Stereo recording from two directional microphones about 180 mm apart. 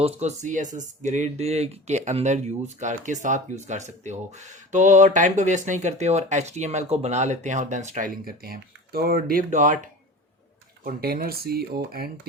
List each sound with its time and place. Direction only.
0.0 s speech: 40° right (ahead or behind); by 12.3 s 60° right (ahead or behind)